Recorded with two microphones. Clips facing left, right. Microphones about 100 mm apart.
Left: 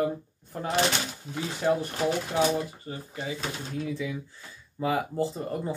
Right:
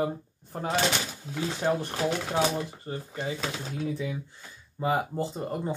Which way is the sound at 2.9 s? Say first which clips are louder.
Right 2 dB; 40° right (ahead or behind).